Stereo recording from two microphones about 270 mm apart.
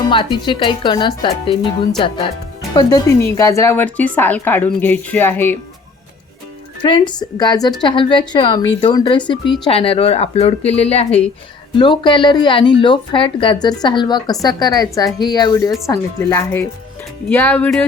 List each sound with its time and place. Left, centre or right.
0.1 s speech: centre
6.8 s speech: centre